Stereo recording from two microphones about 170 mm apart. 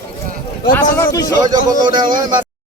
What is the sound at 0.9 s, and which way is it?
Speech, 20° left (ahead or behind).